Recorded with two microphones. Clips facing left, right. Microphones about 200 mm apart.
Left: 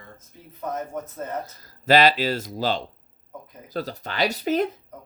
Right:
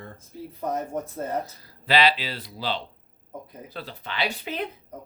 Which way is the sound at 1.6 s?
45° left (ahead or behind).